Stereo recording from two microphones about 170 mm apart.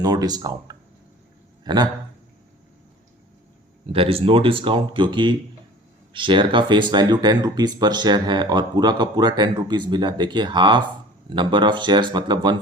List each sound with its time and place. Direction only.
0.0 s speech: 25° right (ahead or behind)
3.9 s speech: 35° right (ahead or behind)